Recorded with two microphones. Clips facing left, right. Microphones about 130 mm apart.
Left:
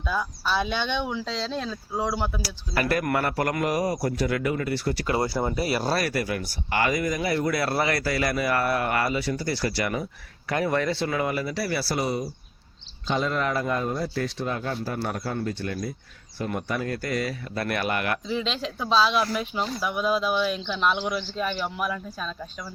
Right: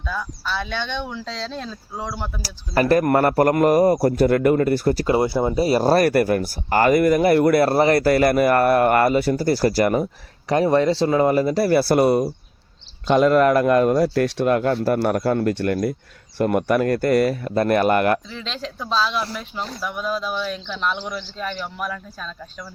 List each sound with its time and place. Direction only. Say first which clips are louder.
0.0 s speech: left 1 dB; 10° left (ahead or behind)
2.4 s speech: right 7 dB; 40° right (ahead or behind)
5.0 s speech: right 6 dB; 20° right (ahead or behind)
5.6 s speech: right 9 dB; 40° right (ahead or behind)
7.0 s speech: right 10 dB; 60° right (ahead or behind)
10.5 s speech: right 8 dB; 30° right (ahead or behind)
18.3 s speech: left 3 dB; 10° left (ahead or behind)